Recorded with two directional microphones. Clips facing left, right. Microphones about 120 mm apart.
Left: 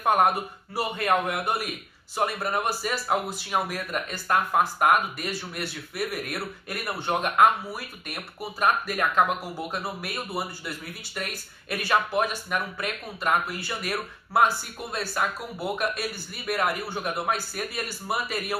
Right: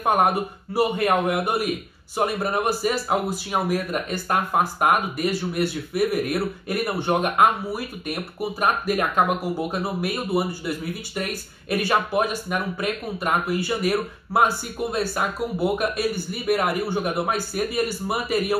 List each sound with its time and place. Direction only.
0.0 s speech: 10° right (ahead or behind)
11.8 s speech: 10° right (ahead or behind)